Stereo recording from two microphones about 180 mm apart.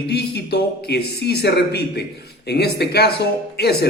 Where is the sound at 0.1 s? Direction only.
65° left (ahead or behind).